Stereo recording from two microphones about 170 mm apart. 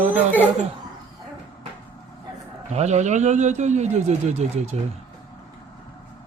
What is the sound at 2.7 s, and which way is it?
Speech, 40° right (ahead or behind).